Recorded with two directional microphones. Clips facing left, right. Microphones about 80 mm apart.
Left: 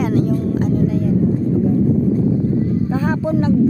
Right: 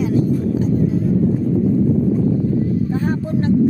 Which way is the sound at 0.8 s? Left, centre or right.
Left.